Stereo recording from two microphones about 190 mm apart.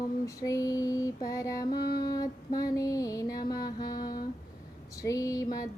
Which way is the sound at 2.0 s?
20° left (ahead or behind).